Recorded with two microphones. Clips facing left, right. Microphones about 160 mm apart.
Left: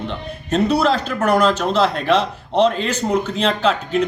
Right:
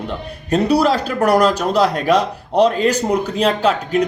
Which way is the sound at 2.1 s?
40° right (ahead or behind).